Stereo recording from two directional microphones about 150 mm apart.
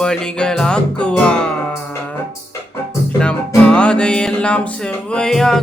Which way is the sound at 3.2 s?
5° left (ahead or behind).